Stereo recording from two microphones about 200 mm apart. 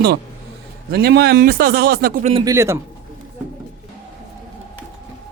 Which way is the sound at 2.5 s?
15° right (ahead or behind).